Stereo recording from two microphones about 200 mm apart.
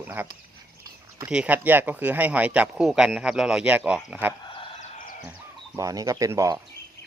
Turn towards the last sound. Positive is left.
turn(degrees=-15)  # may be behind; listen again after turning